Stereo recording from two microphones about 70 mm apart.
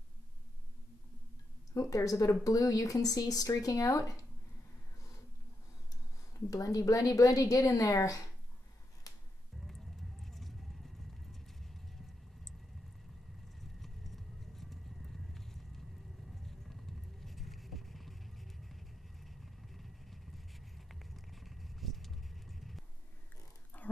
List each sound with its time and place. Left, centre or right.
1.7 s speech: left
6.3 s speech: left
9.1 s music: left
9.7 s a sound: centre
11.3 s clip-clop: centre
13.6 s a sound: centre
16.3 s vehicle: centre
23.7 s dog: left